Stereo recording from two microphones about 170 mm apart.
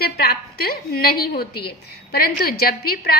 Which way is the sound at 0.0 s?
65° left (ahead or behind).